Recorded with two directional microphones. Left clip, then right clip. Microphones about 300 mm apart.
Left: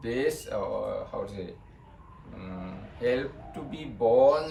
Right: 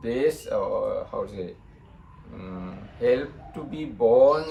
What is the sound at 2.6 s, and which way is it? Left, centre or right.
Speech, centre.